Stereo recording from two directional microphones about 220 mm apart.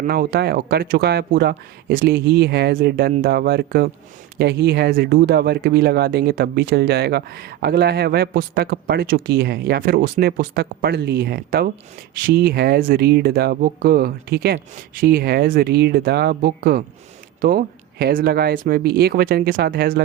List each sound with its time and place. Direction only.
0.0 s speech: 45° right (ahead or behind)